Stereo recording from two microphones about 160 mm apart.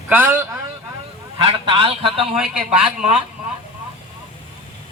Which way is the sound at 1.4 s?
35° right (ahead or behind).